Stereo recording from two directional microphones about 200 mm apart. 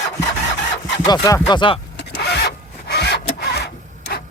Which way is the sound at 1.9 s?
55° left (ahead or behind).